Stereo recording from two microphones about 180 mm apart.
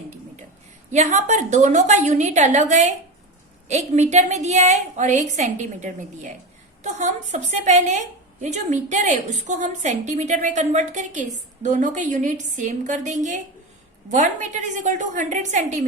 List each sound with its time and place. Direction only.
0.9 s a woman's voice: 40° right (ahead or behind)